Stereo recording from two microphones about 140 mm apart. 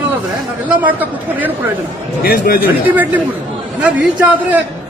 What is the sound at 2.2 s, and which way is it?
Speech, 90° left.